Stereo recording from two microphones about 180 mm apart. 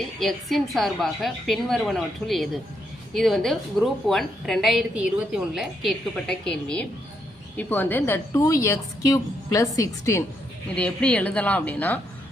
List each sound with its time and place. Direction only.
0.2 s a woman's voice: centre (ahead or behind)